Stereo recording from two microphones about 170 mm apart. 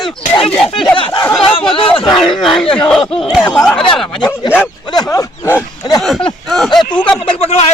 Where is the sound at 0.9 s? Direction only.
30° left (ahead or behind).